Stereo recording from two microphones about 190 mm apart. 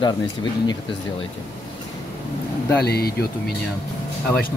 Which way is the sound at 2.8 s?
55° left (ahead or behind).